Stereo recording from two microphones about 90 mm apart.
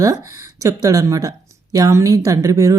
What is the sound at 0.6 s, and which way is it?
A woman's voice, 40° right (ahead or behind).